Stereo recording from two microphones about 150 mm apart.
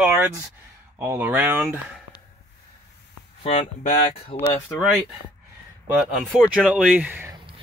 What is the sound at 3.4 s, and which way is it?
Speech, 50° left (ahead or behind).